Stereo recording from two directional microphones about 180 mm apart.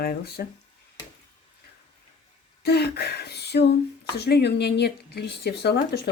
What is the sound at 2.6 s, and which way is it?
Speech, 65° left (ahead or behind).